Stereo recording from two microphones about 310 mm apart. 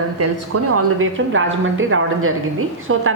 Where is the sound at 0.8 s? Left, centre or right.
Right.